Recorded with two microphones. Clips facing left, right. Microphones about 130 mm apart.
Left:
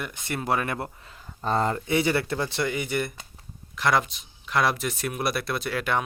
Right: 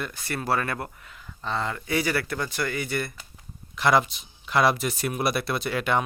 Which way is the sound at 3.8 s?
Centre (ahead or behind).